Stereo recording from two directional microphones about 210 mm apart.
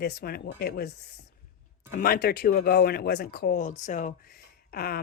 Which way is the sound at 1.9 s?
45° left (ahead or behind).